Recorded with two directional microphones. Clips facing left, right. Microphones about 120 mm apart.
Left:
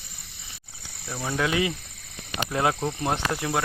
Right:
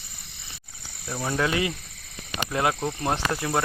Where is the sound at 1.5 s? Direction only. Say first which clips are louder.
Left 1 dB; 20° left (ahead or behind).